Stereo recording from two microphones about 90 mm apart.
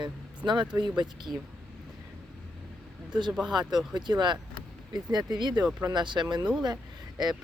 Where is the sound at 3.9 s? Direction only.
55° right (ahead or behind).